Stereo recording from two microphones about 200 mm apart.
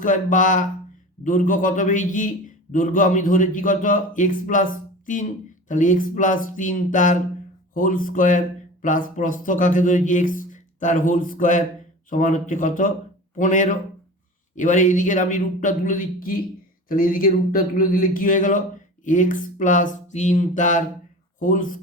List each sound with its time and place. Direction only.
0.0 s speech: 40° left (ahead or behind)